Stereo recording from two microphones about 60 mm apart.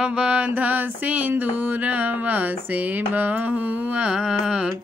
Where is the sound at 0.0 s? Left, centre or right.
Centre.